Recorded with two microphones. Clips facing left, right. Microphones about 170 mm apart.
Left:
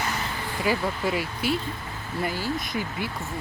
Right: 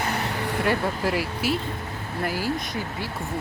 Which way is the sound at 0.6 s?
Centre (ahead or behind).